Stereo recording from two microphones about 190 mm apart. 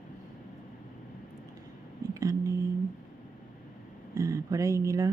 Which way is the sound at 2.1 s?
15° right (ahead or behind).